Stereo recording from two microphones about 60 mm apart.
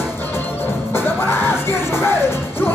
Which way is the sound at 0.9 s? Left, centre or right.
Left.